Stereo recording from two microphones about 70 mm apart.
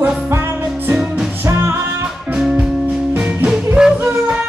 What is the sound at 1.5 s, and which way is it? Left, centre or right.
Music, right.